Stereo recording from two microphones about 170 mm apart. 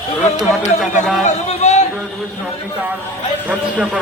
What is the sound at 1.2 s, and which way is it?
Speech, 40° left (ahead or behind).